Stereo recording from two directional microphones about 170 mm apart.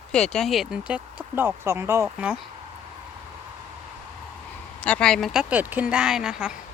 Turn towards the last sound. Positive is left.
turn(degrees=-5)  # may be behind; listen again after turning